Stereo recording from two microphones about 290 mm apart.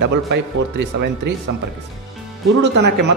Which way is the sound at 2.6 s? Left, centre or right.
Right.